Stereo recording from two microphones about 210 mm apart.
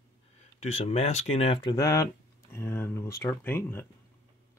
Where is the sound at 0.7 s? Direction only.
30° left (ahead or behind); by 3.9 s 10° left (ahead or behind).